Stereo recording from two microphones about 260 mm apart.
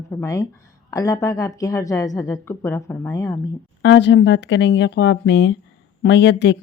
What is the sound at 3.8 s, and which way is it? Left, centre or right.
Speech, left.